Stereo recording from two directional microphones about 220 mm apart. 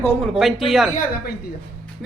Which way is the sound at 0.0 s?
5° left (ahead or behind).